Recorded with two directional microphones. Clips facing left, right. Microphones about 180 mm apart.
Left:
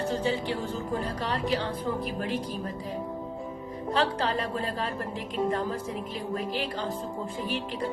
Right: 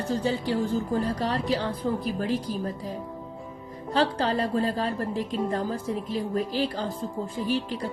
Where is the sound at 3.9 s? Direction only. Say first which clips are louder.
Right 3 dB; 35° right (ahead or behind).